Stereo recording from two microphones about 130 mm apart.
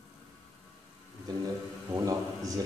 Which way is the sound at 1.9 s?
25° right (ahead or behind).